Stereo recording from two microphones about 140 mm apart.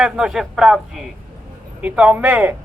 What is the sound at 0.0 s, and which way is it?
A man's voice, 5° right (ahead or behind).